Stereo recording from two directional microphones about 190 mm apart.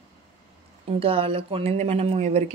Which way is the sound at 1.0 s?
30° right (ahead or behind).